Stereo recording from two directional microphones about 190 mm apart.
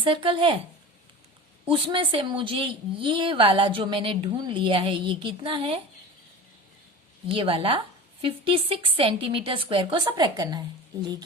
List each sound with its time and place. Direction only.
0.0 s a woman's voice: 25° right (ahead or behind)
1.6 s a woman's voice: 25° right (ahead or behind)
7.3 s a woman's voice: 30° right (ahead or behind)